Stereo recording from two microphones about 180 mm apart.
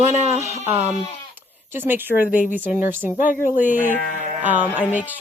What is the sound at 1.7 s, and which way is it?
Speech, 10° right (ahead or behind).